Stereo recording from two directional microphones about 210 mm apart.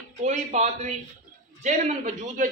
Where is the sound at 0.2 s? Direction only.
35° right (ahead or behind).